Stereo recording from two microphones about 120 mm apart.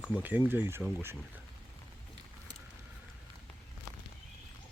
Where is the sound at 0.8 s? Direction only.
Centre (ahead or behind).